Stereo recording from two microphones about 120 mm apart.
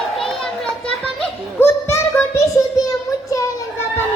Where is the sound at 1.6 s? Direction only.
20° left (ahead or behind).